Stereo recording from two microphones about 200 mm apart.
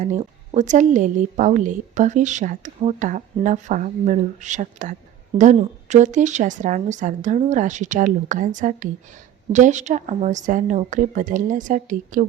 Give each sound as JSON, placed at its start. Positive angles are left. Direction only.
{"t": 0.0, "sound": "a woman's voice", "side_deg": -35}